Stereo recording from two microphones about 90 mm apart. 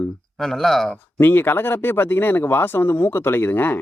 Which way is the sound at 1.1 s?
25° left (ahead or behind).